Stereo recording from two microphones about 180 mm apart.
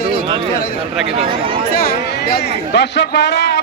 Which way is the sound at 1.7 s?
60° left (ahead or behind).